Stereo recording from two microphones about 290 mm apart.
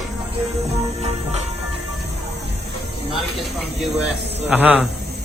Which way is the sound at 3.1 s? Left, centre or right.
Centre.